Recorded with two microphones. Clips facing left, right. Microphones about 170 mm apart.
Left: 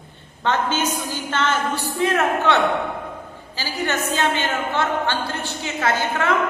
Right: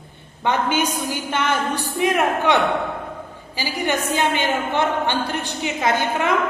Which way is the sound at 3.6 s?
15° right (ahead or behind).